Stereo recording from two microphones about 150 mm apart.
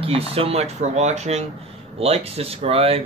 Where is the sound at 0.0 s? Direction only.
40° right (ahead or behind).